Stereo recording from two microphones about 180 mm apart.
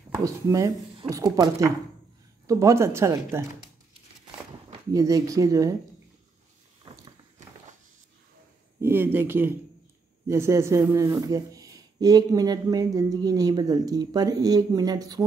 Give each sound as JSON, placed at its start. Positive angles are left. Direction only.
{"t": 0.2, "sound": "speech", "side_deg": -20}
{"t": 4.9, "sound": "speech", "side_deg": -20}
{"t": 8.8, "sound": "speech", "side_deg": -10}